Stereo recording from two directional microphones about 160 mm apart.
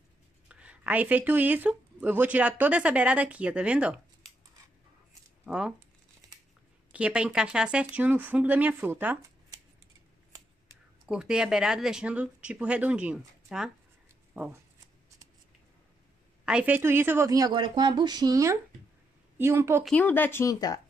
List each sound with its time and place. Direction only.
0.5 s speech: 10° right (ahead or behind)
5.4 s speech: 5° right (ahead or behind)
6.9 s speech: 5° right (ahead or behind)
11.1 s speech: 5° right (ahead or behind)
16.4 s a woman's voice: 10° right (ahead or behind)
19.8 s speech: 5° left (ahead or behind)